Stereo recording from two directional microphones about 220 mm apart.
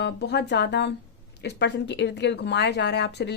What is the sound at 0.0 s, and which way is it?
Speech, 50° left (ahead or behind).